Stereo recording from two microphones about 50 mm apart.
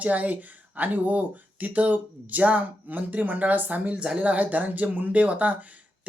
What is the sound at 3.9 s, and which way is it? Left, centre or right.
Speech, right.